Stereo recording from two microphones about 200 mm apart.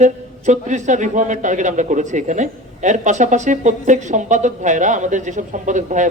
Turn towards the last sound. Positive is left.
turn(degrees=-40)  # may be behind; listen again after turning